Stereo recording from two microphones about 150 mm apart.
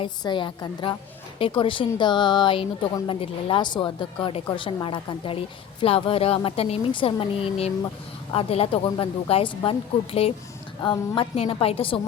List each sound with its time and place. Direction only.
0.0 s speech: 30° left (ahead or behind)